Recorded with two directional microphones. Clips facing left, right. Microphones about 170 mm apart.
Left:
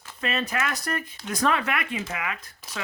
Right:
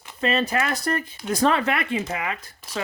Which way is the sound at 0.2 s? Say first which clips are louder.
Right 5 dB; 30° right (ahead or behind).